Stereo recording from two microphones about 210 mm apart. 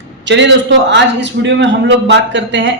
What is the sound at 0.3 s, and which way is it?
A man's voice, 60° right (ahead or behind).